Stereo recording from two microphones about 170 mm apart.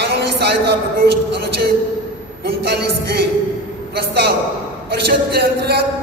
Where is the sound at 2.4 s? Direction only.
70° right (ahead or behind).